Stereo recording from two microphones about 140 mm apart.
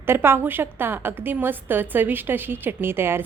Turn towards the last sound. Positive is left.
turn(degrees=-15)  # may be behind; listen again after turning